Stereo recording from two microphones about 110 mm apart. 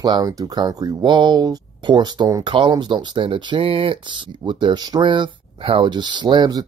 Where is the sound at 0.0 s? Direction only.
35° right (ahead or behind).